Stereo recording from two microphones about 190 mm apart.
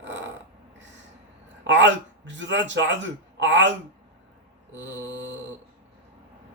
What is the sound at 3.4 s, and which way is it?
Speech, 75° right (ahead or behind).